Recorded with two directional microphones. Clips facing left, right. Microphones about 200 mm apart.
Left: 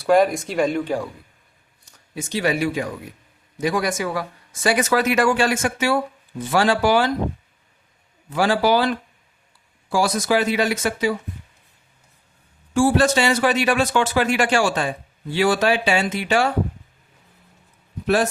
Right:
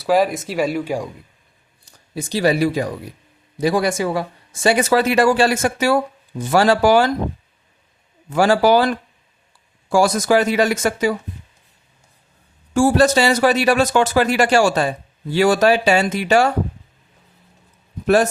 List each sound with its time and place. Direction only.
0.0 s speech: centre (ahead or behind)
1.8 s speech: 35° right (ahead or behind)
8.3 s speech: 45° right (ahead or behind)
12.7 s speech: 40° right (ahead or behind)
18.0 s a man's voice: 45° right (ahead or behind)